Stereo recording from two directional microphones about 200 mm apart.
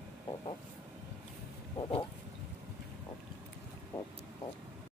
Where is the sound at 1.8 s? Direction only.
25° left (ahead or behind).